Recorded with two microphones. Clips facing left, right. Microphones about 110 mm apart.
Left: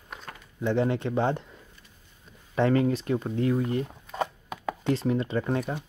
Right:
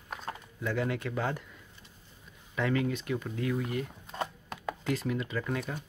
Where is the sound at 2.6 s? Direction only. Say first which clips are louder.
Left 7 dB; 35° left (ahead or behind).